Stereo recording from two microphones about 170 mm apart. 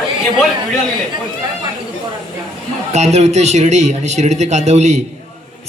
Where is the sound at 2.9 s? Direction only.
40° right (ahead or behind).